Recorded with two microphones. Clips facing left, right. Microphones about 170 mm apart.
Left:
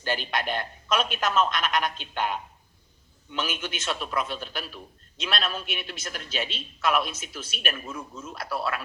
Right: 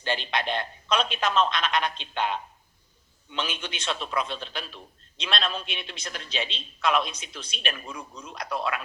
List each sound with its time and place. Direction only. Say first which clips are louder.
0.0 s a man's voice: even; 5° left (ahead or behind)